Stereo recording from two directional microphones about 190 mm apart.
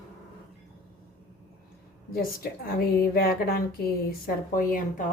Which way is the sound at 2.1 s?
50° left (ahead or behind).